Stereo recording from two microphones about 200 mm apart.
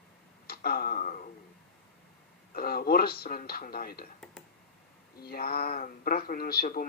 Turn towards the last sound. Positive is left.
turn(degrees=45)  # may be behind; listen again after turning